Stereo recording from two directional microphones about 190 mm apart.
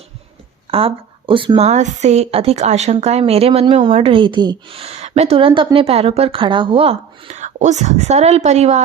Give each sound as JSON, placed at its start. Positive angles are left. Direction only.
{"t": 0.7, "sound": "a woman's voice", "side_deg": -30}